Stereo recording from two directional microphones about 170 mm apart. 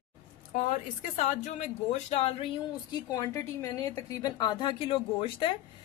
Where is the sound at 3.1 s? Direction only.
15° left (ahead or behind).